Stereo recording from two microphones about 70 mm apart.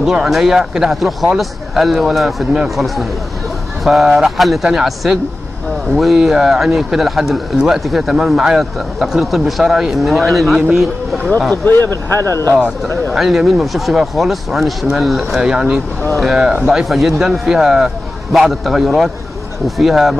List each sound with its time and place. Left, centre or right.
0.0 s speech: centre
11.5 s speech: left
13.1 s speech: centre
15.4 s speech: centre